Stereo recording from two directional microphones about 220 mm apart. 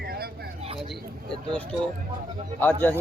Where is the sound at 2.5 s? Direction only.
10° left (ahead or behind).